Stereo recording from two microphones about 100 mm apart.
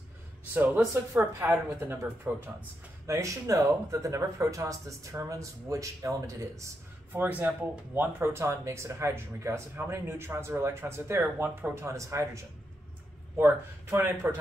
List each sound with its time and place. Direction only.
1.1 s speech: 25° right (ahead or behind)
7.1 s speech: 20° right (ahead or behind)
11.8 s speech: 30° right (ahead or behind)